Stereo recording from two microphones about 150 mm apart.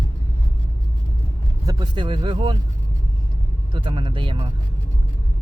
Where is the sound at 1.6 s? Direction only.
25° right (ahead or behind).